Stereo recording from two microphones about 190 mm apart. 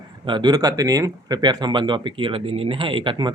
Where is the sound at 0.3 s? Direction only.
25° right (ahead or behind).